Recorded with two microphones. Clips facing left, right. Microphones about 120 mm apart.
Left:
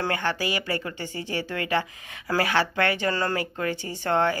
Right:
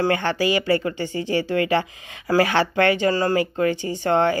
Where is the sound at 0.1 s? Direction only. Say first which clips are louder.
Right 6 dB; 25° right (ahead or behind).